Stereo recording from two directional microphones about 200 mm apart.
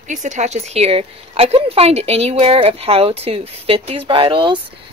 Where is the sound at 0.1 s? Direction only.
40° right (ahead or behind).